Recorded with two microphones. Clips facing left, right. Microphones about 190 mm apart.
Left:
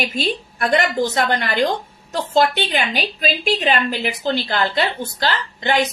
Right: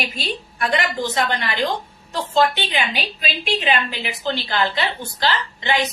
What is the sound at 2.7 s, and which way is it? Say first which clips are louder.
A woman's voice: left 3 dB; 45° left (ahead or behind).